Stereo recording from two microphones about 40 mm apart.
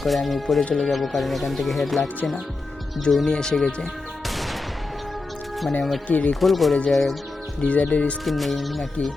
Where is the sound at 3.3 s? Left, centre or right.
Centre.